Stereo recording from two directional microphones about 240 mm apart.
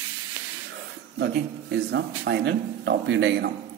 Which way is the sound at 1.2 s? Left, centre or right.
Right.